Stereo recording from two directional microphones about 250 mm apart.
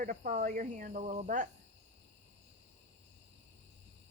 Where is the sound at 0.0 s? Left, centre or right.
Right.